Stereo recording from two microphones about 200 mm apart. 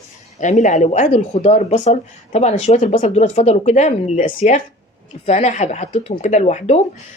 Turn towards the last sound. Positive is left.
turn(degrees=35)  # may be behind; listen again after turning